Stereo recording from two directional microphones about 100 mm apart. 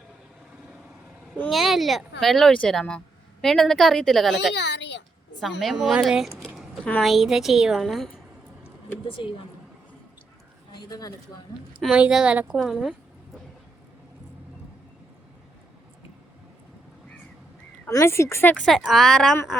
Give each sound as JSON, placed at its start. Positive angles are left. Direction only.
{"t": 1.5, "sound": "a woman's voice", "side_deg": 0}
{"t": 9.2, "sound": "a woman's voice", "side_deg": 50}
{"t": 10.8, "sound": "speech", "side_deg": 40}
{"t": 11.9, "sound": "a woman's voice", "side_deg": -10}
{"t": 17.8, "sound": "speech", "side_deg": 25}
{"t": 18.5, "sound": "a woman's voice", "side_deg": 5}